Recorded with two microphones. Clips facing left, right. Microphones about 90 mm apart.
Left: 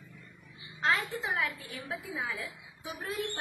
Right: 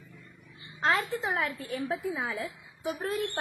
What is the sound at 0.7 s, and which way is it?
A woman's voice, 45° right (ahead or behind).